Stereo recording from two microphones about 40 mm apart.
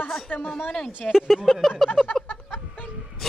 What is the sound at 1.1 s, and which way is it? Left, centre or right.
Speech, centre.